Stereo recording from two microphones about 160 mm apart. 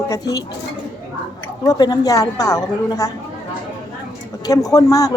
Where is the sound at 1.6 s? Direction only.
25° left (ahead or behind).